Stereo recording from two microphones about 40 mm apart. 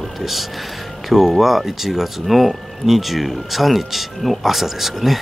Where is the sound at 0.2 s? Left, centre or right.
Centre.